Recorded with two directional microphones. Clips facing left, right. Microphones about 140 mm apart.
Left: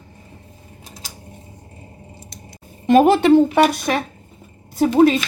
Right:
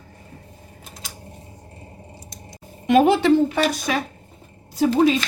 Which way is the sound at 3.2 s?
60° left (ahead or behind).